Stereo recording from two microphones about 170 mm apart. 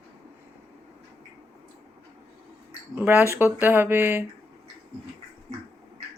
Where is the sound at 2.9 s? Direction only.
10° right (ahead or behind).